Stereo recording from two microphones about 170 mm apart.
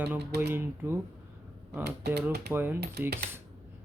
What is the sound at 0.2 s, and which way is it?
Speech, 80° right.